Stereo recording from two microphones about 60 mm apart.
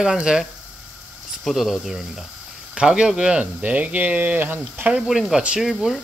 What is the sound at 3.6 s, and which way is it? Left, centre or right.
Speech, right.